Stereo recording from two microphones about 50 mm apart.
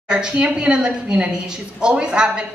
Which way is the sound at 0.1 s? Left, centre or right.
Centre.